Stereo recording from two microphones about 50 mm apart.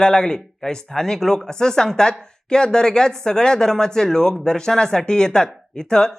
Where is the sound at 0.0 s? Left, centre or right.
Centre.